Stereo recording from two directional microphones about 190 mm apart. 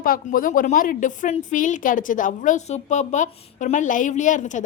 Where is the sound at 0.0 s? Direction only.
50° left (ahead or behind).